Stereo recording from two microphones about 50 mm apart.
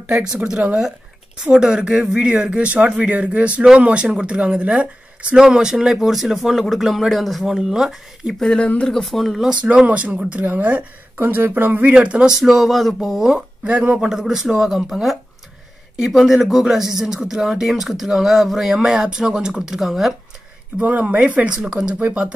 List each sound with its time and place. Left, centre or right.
0.1 s speech: centre
1.4 s speech: centre
5.3 s speech: centre
8.4 s speech: centre
8.8 s speech: centre
9.6 s speech: right
11.1 s speech: right
12.0 s speech: right
12.3 s speech: centre
13.7 s speech: right
14.0 s speech: centre
18.8 s speech: centre
20.8 s speech: right
21.5 s speech: centre